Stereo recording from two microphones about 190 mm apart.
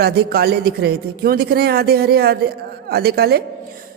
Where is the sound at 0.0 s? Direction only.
55° right (ahead or behind).